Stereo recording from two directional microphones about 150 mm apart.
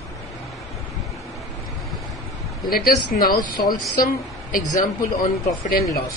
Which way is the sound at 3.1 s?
80° left.